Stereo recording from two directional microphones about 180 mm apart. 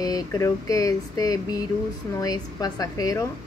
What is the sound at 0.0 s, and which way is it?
Speech, 20° left (ahead or behind).